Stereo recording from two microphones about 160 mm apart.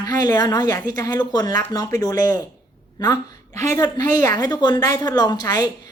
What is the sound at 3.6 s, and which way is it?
A woman's voice, 20° left (ahead or behind).